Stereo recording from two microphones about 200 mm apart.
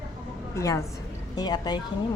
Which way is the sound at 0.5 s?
15° left (ahead or behind).